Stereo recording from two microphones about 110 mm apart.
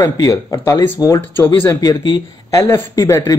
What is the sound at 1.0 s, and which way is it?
Speech, 20° left (ahead or behind).